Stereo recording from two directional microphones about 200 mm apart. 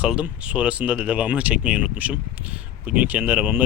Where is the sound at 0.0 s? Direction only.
5° right (ahead or behind).